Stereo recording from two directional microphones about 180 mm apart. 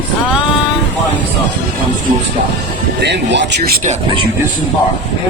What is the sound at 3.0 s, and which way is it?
Speech, 70° right (ahead or behind).